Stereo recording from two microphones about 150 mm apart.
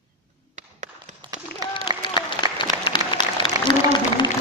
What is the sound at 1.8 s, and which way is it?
Applause, 30° left (ahead or behind).